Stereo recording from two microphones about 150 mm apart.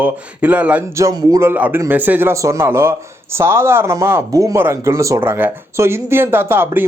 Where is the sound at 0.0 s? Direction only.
10° right (ahead or behind).